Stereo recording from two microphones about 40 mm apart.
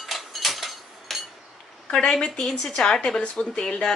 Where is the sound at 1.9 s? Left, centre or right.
Centre.